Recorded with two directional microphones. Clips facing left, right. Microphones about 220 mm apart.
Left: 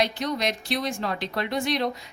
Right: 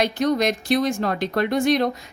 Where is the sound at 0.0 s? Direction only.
45° right (ahead or behind).